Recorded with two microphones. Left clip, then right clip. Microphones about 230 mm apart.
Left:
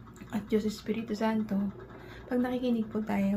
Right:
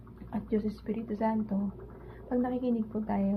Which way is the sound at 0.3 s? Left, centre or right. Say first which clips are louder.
Left 2 dB; centre.